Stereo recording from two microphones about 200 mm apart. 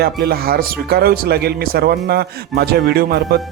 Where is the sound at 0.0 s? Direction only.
50° right (ahead or behind).